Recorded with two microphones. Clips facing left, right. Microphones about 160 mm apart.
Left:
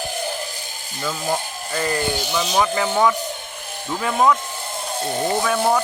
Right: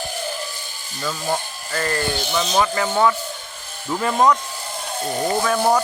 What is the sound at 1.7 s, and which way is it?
Speech, 15° left (ahead or behind).